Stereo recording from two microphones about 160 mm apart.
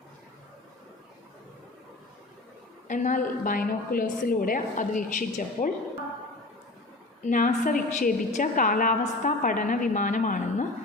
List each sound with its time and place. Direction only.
2.8 s a woman's voice: 55° left (ahead or behind)
7.3 s a woman's voice: 55° left (ahead or behind)